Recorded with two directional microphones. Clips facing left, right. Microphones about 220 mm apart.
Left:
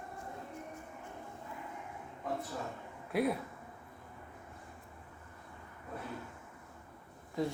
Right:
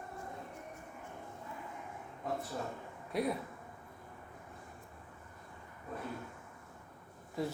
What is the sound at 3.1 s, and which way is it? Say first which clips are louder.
Speech: left 3 dB; 5° left (ahead or behind).